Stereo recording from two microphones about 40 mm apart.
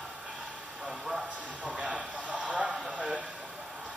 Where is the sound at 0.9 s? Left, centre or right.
Centre.